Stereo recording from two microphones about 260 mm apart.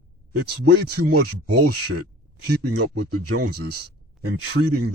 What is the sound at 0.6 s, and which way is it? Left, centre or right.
Speech, right.